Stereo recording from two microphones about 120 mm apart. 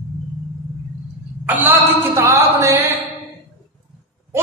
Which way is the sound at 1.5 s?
15° right (ahead or behind).